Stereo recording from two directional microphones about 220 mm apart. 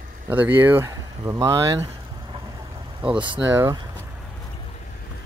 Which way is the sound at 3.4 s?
10° right (ahead or behind).